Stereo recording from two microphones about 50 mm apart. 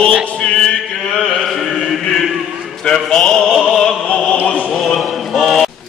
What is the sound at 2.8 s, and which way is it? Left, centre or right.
Mantra, centre.